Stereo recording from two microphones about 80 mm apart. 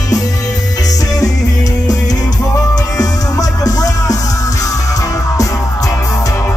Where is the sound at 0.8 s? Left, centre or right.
Left.